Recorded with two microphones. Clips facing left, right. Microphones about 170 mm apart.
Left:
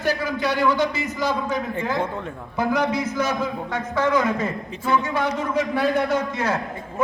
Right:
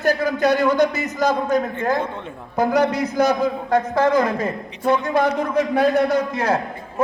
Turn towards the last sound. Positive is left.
turn(degrees=-40)  # may be behind; listen again after turning